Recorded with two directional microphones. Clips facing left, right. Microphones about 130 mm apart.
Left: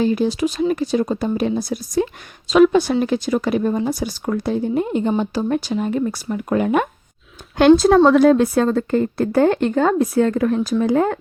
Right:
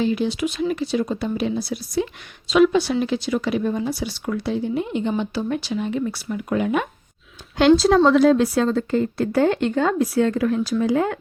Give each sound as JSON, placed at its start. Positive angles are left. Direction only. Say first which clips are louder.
{"t": 0.0, "sound": "speech", "louder": "left 3 dB", "side_deg": 40}